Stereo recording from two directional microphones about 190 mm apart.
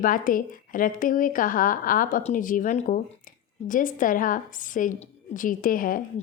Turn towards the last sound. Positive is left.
turn(degrees=45)  # may be behind; listen again after turning